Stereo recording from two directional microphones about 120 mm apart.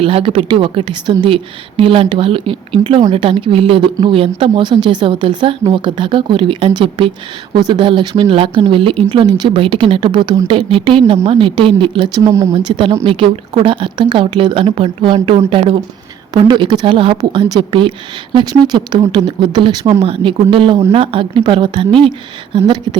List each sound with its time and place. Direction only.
0.0 s speech: 50° right (ahead or behind)
12.1 s speech: 25° right (ahead or behind)
12.6 s speech: 40° right (ahead or behind)
16.3 s speech: 35° right (ahead or behind)